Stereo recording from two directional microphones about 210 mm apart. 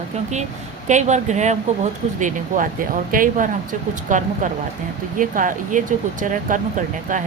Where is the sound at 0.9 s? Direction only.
35° right (ahead or behind).